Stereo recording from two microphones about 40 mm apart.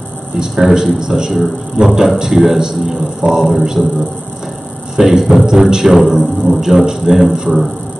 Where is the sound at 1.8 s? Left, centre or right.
Right.